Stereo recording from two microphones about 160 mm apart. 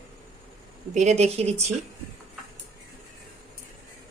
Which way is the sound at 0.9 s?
45° right (ahead or behind).